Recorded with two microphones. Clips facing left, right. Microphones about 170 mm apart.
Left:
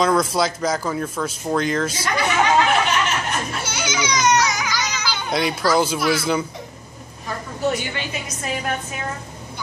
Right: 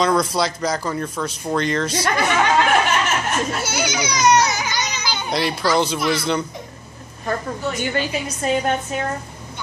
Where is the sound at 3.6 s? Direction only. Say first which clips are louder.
Right 2 dB; 40° right (ahead or behind).